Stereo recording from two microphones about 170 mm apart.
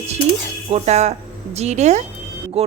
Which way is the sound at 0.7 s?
40° right (ahead or behind).